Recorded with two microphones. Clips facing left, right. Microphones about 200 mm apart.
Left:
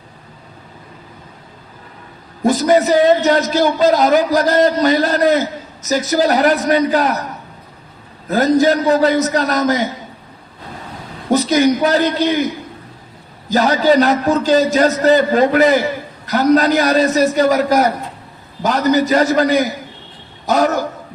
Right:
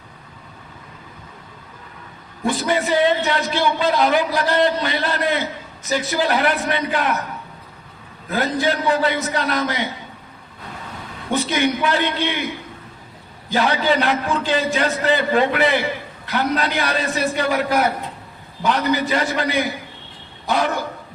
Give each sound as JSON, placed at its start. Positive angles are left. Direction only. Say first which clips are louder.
{"t": 2.4, "sound": "a man's voice", "louder": "left 8 dB", "side_deg": 40}
{"t": 8.3, "sound": "a man's voice", "louder": "left 8 dB", "side_deg": 40}
{"t": 11.3, "sound": "a man's voice", "louder": "left 7 dB", "side_deg": 40}